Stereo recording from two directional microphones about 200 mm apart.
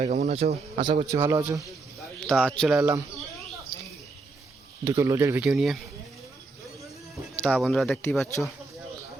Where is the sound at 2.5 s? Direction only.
5° right (ahead or behind).